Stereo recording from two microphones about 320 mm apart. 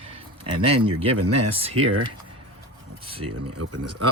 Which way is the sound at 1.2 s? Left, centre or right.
Right.